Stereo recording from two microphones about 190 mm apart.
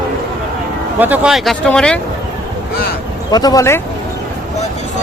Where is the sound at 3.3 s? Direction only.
20° left (ahead or behind).